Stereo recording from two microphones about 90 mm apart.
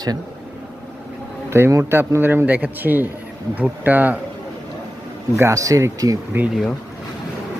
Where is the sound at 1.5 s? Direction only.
30° right (ahead or behind).